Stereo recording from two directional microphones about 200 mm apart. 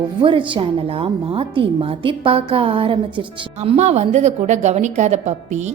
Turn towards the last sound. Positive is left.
turn(degrees=-35)  # may be behind; listen again after turning